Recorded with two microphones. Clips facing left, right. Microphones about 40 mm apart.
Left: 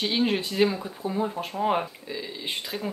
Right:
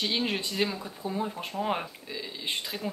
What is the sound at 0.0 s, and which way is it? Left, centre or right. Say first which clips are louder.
Speech: left 4 dB; centre.